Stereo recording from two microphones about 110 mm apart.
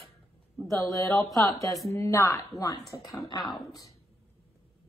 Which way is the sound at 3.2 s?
40° left (ahead or behind).